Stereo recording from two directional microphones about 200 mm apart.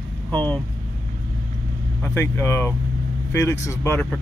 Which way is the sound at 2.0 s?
10° left (ahead or behind).